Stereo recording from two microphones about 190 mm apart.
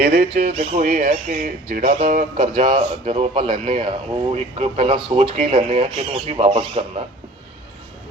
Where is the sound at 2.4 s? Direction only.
30° right (ahead or behind).